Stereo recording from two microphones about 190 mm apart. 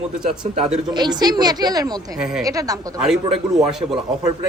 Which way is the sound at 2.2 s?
5° right (ahead or behind).